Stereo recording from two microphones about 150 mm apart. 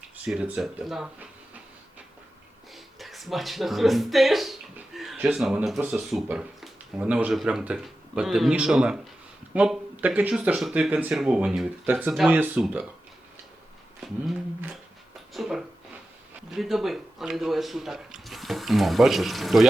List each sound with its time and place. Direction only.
0.3 s speech: 10° right (ahead or behind)
2.7 s speech: centre (ahead or behind)
15.3 s speech: centre (ahead or behind)